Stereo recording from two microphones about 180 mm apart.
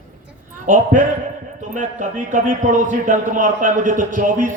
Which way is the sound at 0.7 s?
45° right (ahead or behind).